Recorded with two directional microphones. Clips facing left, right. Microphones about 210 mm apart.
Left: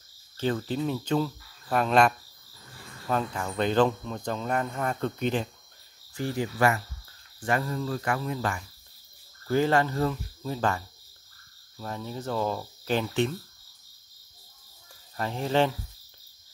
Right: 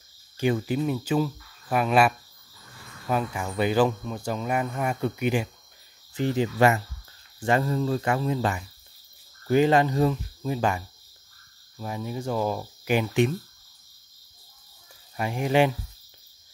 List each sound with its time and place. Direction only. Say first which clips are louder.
0.4 s speech: right 3 dB; 10° right (ahead or behind)
6.1 s cricket: right 5 dB; 20° right (ahead or behind)
9.5 s speech: right 4 dB; 20° right (ahead or behind)
11.8 s speech: right 3 dB; 10° right (ahead or behind)
15.1 s speech: right 3 dB; 10° right (ahead or behind)